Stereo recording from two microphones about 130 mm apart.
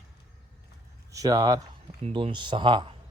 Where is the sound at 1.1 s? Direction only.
30° right (ahead or behind).